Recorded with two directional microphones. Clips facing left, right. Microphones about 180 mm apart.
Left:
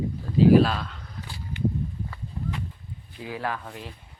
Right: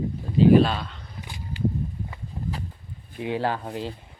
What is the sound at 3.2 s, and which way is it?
Speech, 25° right (ahead or behind).